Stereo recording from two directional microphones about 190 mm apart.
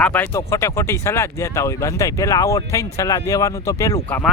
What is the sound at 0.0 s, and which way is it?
Speech, 10° left (ahead or behind).